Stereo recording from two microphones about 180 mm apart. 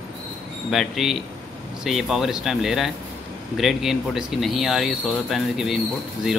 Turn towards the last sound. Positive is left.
turn(degrees=0)  # may be behind; listen again after turning